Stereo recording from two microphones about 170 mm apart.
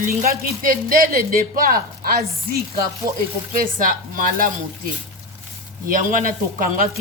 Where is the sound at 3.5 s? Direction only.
55° right (ahead or behind).